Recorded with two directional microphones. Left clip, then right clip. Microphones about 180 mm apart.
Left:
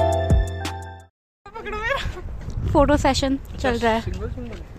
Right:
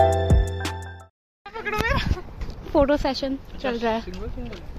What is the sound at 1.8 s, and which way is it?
Goat, 15° left (ahead or behind).